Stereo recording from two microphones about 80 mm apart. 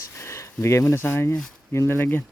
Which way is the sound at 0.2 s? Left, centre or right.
Left.